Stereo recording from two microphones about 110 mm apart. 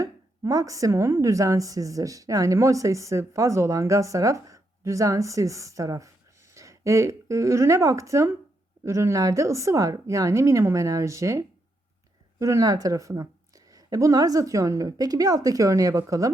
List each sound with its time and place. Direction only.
0.0 s a woman's voice: 30° right (ahead or behind)